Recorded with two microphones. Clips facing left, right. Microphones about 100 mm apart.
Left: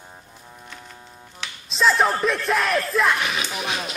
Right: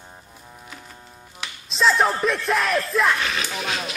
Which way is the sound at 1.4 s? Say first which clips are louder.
Even; centre (ahead or behind).